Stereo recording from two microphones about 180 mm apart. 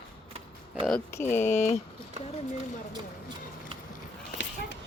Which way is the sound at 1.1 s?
15° left (ahead or behind).